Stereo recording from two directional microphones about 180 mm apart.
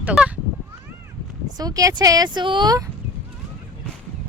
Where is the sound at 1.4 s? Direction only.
20° right (ahead or behind).